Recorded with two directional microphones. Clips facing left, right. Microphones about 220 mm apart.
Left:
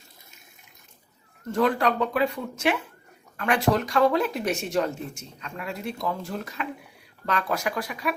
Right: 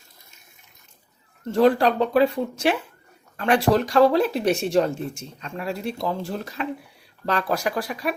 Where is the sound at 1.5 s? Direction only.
30° right (ahead or behind).